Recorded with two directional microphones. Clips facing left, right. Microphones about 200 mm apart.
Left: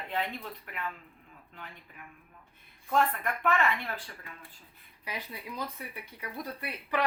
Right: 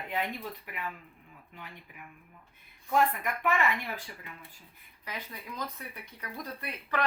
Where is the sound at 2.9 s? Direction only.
10° right (ahead or behind).